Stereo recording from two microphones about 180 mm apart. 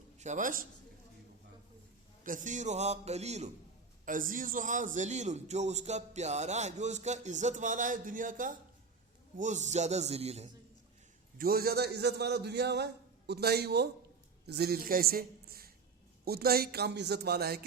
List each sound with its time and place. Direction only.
0.2 s a man's voice: 45° right (ahead or behind)
2.2 s a man's voice: 45° right (ahead or behind)
4.0 s a man's voice: 50° right (ahead or behind)
11.3 s a man's voice: 55° right (ahead or behind)